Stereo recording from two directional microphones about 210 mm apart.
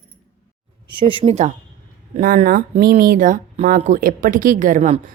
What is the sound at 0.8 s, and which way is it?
Speech, 25° right (ahead or behind).